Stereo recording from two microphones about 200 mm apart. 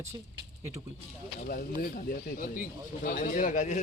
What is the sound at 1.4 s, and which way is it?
Speech, 45° left (ahead or behind).